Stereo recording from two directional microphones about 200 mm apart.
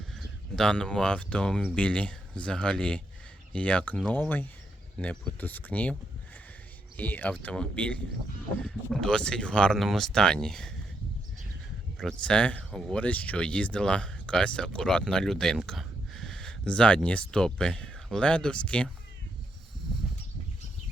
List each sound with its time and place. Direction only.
0.2 s speech: 5° left (ahead or behind)
11.9 s speech: 5° left (ahead or behind)